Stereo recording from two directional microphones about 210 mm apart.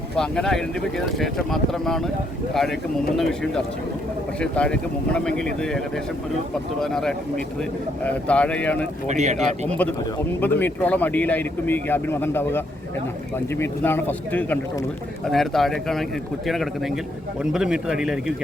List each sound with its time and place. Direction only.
0.2 s speech: centre (ahead or behind)
4.4 s speech: 5° left (ahead or behind)
9.0 s speech: 35° right (ahead or behind)
9.6 s speech: 5° left (ahead or behind)
17.4 s speech: 5° right (ahead or behind)